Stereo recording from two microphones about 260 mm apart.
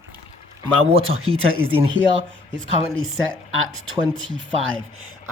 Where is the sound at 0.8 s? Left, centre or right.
Right.